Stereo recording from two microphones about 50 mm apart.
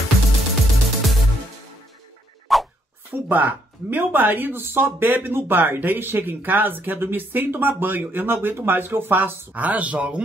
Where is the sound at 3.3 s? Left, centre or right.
Right.